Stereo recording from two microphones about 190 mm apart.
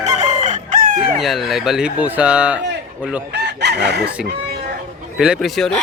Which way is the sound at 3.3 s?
60° right (ahead or behind).